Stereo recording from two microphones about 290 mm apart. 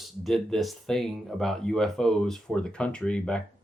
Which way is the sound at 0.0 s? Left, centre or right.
Centre.